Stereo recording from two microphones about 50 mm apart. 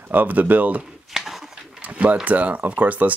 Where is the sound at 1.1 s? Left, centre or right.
Centre.